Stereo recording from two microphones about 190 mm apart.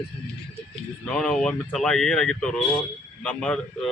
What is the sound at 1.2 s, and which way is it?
Speech, 5° left (ahead or behind).